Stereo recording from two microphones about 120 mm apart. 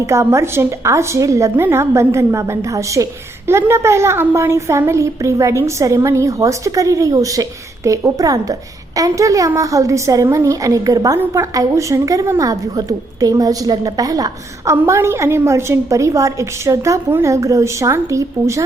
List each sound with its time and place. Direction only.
0.0 s a woman's voice: 25° right (ahead or behind)